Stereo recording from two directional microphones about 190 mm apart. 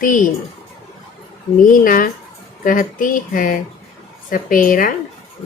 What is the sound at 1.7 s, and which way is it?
Speech, 50° left (ahead or behind).